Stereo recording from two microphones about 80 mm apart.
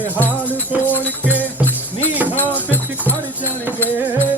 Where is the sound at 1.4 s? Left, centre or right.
Left.